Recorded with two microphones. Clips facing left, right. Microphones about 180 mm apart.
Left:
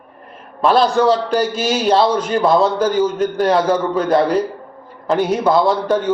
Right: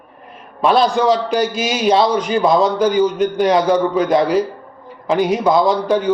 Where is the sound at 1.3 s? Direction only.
Centre (ahead or behind).